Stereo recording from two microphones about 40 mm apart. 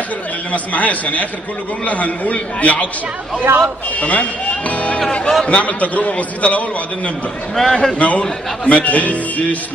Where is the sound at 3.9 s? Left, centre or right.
Left.